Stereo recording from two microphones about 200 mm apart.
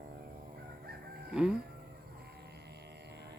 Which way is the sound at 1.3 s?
5° right (ahead or behind).